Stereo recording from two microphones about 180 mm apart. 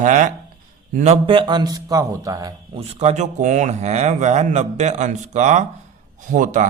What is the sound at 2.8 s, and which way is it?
A man's voice, 40° right (ahead or behind).